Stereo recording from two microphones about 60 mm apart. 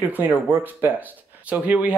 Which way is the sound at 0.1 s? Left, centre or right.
Right.